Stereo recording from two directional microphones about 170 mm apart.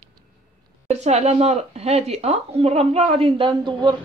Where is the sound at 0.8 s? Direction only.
40° right (ahead or behind).